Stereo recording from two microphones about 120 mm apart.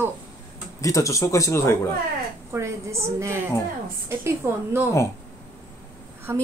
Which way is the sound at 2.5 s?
25° right (ahead or behind).